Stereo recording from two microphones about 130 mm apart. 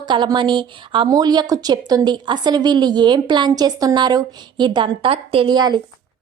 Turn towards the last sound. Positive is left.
turn(degrees=-35)  # may be behind; listen again after turning